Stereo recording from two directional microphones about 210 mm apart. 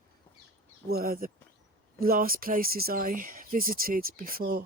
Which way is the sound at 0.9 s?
45° right (ahead or behind).